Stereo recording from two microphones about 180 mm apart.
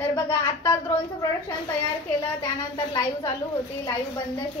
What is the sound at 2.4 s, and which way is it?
Speech, 20° left (ahead or behind).